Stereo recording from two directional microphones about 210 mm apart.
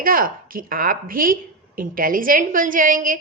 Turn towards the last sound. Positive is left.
turn(degrees=-40)  # may be behind; listen again after turning